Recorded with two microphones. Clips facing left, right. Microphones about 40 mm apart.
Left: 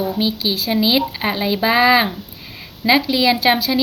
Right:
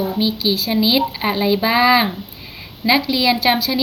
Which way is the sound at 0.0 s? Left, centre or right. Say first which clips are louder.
Right 1 dB; centre.